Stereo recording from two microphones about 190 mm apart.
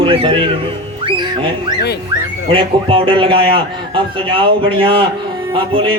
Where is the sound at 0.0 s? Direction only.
30° right (ahead or behind).